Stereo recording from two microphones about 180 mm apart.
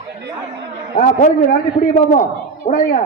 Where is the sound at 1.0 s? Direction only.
50° left (ahead or behind).